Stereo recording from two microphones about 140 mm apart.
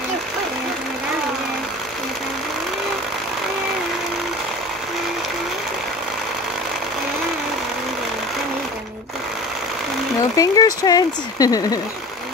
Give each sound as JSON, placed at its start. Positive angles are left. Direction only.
{"t": 10.3, "sound": "speech", "side_deg": 25}